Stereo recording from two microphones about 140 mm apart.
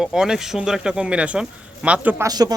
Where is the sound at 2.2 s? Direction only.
25° right (ahead or behind).